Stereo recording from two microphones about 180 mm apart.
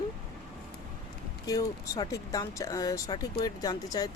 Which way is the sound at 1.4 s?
20° left (ahead or behind).